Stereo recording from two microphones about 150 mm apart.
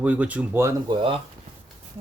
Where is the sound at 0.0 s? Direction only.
10° right (ahead or behind).